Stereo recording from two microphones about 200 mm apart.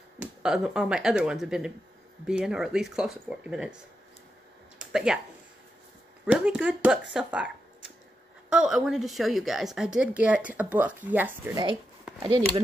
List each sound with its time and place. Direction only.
0.2 s speech: 5° right (ahead or behind)
4.7 s a sound: 5° right (ahead or behind)
6.2 s speech: 5° right (ahead or behind)
12.2 s speech: 20° right (ahead or behind)